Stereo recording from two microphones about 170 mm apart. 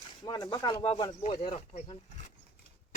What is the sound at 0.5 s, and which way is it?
Speech, 25° left (ahead or behind).